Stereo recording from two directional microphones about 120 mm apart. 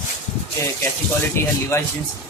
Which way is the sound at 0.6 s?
25° left (ahead or behind).